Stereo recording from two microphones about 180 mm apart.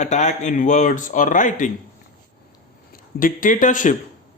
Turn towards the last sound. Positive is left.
turn(degrees=45)  # may be behind; listen again after turning